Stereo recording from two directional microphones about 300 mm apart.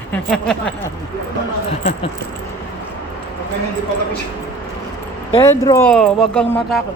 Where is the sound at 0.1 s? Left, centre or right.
Centre.